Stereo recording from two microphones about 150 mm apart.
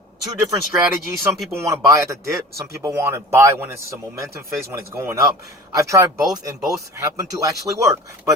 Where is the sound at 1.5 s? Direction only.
20° right (ahead or behind).